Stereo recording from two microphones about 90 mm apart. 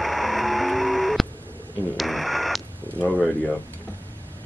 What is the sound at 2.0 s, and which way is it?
Radio, centre (ahead or behind).